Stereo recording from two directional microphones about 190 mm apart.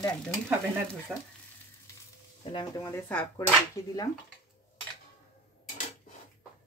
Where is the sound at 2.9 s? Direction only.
10° left (ahead or behind).